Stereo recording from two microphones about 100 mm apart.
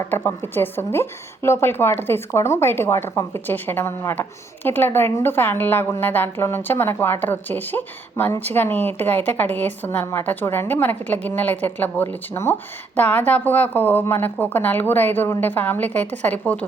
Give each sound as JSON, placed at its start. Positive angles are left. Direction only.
{"t": 0.1, "sound": "a woman's voice", "side_deg": 20}